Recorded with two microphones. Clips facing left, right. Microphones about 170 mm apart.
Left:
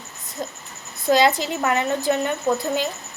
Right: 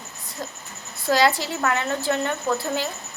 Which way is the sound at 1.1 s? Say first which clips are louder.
Left 2 dB; 20° left (ahead or behind).